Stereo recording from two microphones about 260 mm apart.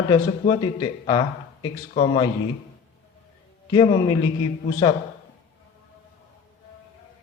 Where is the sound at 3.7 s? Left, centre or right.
Centre.